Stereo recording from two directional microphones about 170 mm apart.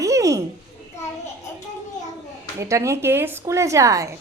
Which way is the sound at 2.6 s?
15° right (ahead or behind).